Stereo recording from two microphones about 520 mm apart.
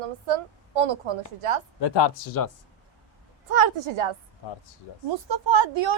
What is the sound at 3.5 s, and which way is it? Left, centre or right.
Speech, right.